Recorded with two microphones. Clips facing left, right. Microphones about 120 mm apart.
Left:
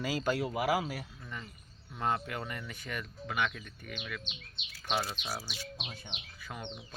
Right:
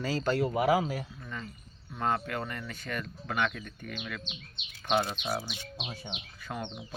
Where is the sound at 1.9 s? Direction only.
15° left (ahead or behind).